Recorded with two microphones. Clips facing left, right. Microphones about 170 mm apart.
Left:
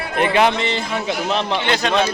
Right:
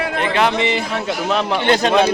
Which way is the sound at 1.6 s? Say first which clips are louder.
Right 5 dB; 45° right (ahead or behind).